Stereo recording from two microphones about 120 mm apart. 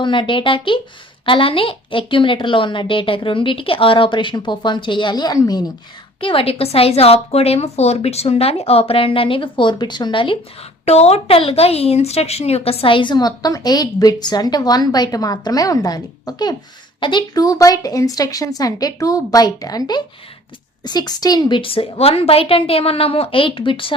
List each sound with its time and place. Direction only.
0.0 s a woman's voice: 45° left (ahead or behind)
6.1 s a woman's voice: 50° left (ahead or behind)
10.8 s a woman's voice: 60° left (ahead or behind); by 23.9 s 45° left (ahead or behind)